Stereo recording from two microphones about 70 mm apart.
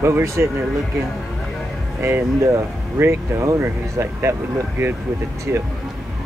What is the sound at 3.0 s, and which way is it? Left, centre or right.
Speech, right.